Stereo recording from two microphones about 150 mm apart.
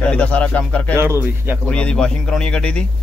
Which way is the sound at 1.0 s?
15° right (ahead or behind).